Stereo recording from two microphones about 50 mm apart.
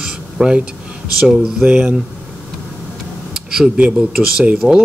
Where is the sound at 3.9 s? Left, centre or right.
Centre.